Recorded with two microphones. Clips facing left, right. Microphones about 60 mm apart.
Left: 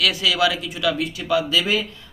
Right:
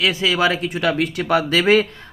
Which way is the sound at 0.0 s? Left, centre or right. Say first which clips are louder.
Right 2 dB; right.